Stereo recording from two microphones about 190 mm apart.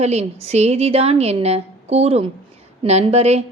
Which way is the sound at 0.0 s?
35° right (ahead or behind).